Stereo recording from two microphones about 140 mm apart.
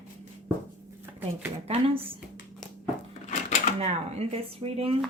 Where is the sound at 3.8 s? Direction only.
50° right (ahead or behind).